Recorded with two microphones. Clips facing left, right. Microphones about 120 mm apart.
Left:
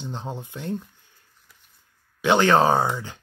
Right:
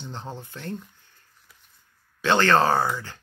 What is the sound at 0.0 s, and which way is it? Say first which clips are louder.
Speech: left 3 dB; 15° left (ahead or behind).